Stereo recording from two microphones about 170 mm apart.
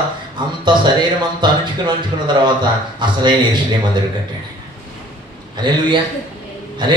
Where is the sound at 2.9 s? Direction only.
25° right (ahead or behind).